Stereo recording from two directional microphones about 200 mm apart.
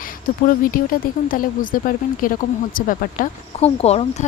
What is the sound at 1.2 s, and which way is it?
Speech, 45° left (ahead or behind).